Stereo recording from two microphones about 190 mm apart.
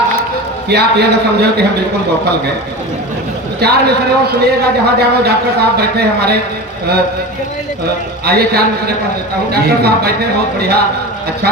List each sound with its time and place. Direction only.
0.7 s a man's voice: 60° right (ahead or behind)
3.6 s a man's voice: 60° right (ahead or behind)
8.2 s a man's voice: 55° right (ahead or behind)